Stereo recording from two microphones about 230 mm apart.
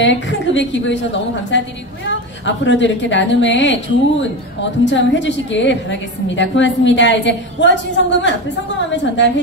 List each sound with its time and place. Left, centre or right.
0.0 s a woman's voice: left